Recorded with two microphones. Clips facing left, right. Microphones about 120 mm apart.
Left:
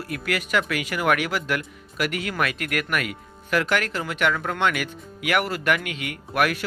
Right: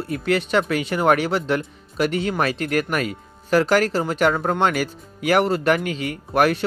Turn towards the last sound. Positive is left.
turn(degrees=-30)  # may be behind; listen again after turning